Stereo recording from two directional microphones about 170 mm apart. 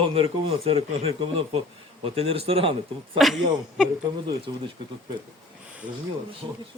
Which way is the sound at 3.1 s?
Centre (ahead or behind).